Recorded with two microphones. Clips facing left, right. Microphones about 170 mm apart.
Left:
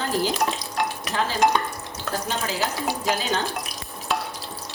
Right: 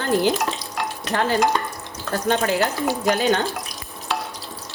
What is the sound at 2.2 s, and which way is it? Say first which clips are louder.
Speech: right 9 dB; 60° right (ahead or behind).